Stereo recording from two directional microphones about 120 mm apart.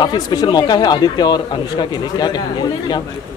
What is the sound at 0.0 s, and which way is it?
Speech, 35° left (ahead or behind).